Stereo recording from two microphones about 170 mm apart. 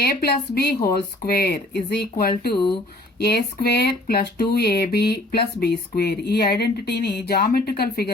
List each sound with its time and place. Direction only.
0.0 s speech: 70° left (ahead or behind)